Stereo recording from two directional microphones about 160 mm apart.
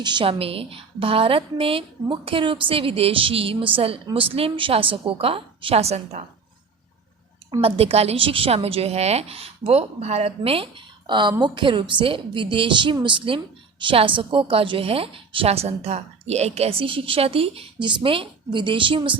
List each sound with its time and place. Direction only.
0.0 s a woman's voice: 30° right (ahead or behind)
7.6 s a woman's voice: 40° right (ahead or behind)